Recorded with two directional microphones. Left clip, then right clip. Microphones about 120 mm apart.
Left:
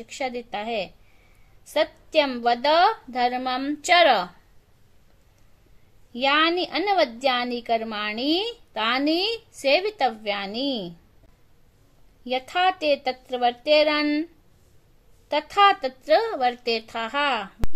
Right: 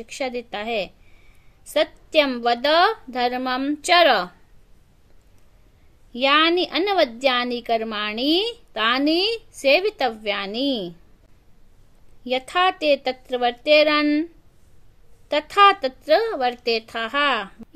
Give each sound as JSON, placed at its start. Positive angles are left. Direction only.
{"t": 0.0, "sound": "a woman's voice", "side_deg": -35}
{"t": 6.1, "sound": "a woman's voice", "side_deg": -40}
{"t": 12.3, "sound": "a woman's voice", "side_deg": -45}